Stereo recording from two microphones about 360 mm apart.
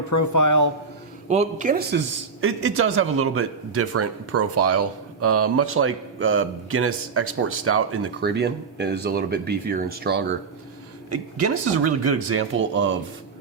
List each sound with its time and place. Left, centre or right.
0.1 s a man's voice: left
1.3 s speech: centre
2.4 s speech: right
11.1 s speech: right